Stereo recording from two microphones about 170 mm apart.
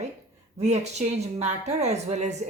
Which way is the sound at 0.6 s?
40° right (ahead or behind).